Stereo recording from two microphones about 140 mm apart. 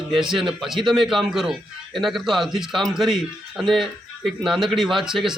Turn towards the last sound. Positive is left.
turn(degrees=-5)  # may be behind; listen again after turning